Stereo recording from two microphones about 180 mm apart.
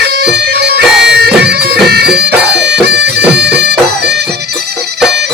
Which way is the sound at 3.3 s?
70° right (ahead or behind).